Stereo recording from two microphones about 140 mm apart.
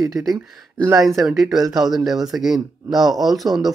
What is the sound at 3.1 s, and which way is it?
Speech, centre (ahead or behind).